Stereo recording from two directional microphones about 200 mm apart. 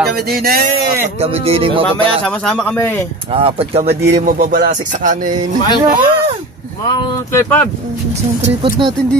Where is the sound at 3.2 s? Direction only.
30° right (ahead or behind).